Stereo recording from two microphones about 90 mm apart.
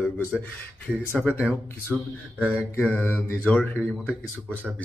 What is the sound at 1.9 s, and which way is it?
Speech, 15° left (ahead or behind).